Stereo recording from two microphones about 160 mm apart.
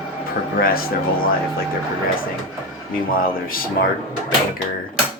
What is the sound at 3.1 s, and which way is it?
Speech, 65° left (ahead or behind).